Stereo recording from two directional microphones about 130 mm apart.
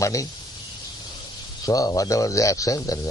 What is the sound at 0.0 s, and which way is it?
Speech, 25° left (ahead or behind).